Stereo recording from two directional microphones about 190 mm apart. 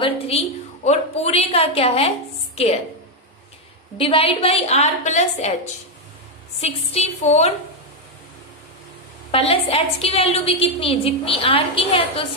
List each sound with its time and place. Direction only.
0.0 s a woman's voice: 35° left (ahead or behind)
4.0 s a woman's voice: 30° left (ahead or behind)
6.6 s a woman's voice: 35° left (ahead or behind)
9.3 s a woman's voice: 30° left (ahead or behind)